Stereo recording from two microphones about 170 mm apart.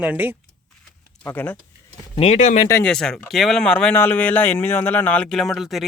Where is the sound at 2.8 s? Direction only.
5° left (ahead or behind).